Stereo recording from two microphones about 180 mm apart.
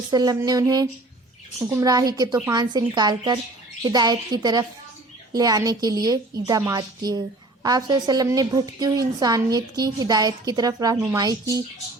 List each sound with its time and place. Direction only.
0.1 s a woman's voice: 20° right (ahead or behind)